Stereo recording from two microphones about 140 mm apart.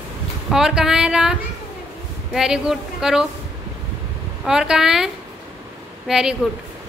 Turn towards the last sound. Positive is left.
turn(degrees=-5)  # may be behind; listen again after turning